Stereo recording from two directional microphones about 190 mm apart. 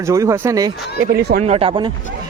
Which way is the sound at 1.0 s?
55° right (ahead or behind).